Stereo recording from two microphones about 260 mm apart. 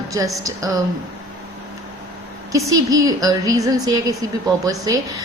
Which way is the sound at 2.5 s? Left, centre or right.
Centre.